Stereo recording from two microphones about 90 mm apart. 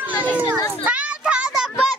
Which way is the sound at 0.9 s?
15° right (ahead or behind).